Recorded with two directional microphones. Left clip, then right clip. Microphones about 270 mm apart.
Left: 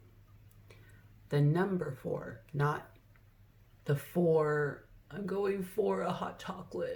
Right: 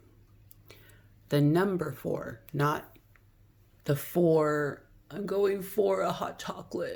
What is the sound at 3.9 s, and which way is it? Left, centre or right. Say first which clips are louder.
Speech: right 4 dB; right.